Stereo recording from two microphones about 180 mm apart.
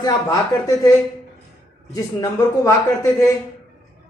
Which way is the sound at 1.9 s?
20° left (ahead or behind).